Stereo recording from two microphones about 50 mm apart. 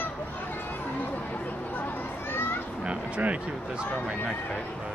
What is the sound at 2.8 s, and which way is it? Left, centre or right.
Speech, right.